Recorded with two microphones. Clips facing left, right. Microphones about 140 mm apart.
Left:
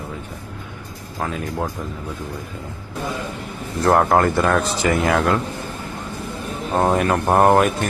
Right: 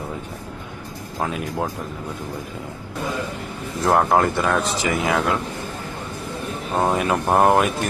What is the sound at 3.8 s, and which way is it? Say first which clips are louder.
Speech: left 2 dB; centre (ahead or behind).